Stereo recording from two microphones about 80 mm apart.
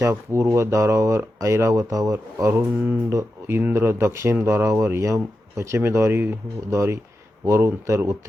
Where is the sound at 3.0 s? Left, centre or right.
Right.